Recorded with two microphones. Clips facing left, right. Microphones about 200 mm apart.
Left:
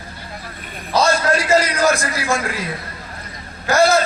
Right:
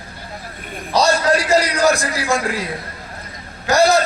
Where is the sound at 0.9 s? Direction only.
15° right (ahead or behind).